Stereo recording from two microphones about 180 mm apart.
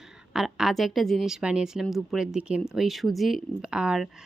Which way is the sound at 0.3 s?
Centre (ahead or behind).